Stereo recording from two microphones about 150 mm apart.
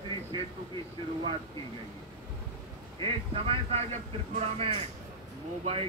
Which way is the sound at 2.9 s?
35° right (ahead or behind).